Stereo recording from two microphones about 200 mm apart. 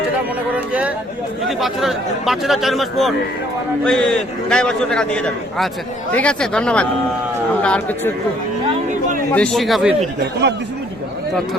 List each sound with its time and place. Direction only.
0.5 s a man's voice: 5° right (ahead or behind)
9.3 s a man's voice: 5° left (ahead or behind)
10.4 s speech: 60° right (ahead or behind)